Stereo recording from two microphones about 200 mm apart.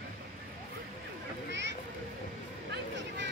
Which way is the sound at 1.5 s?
65° right (ahead or behind).